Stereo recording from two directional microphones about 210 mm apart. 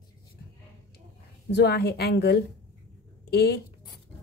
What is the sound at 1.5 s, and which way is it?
A woman's voice, 50° left (ahead or behind).